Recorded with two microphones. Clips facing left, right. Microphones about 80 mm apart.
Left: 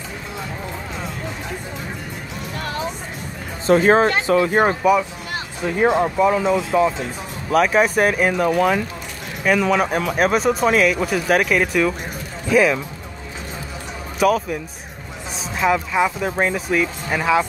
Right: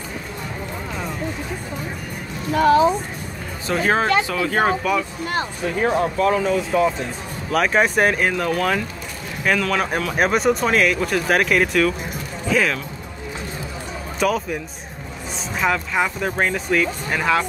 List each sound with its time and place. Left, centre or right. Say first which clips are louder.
3.6 s speech: left 5 dB; left; by 6.9 s centre
7.5 s speech: left 2 dB; centre
14.2 s speech: left 3 dB; centre
15.9 s speech: left 2 dB; centre